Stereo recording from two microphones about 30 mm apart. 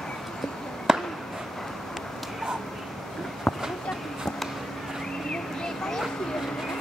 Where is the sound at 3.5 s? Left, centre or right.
Centre.